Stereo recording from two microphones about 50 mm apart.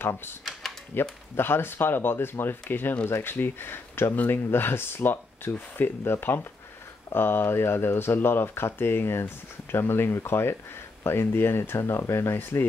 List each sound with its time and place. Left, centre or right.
0.0 s speech: left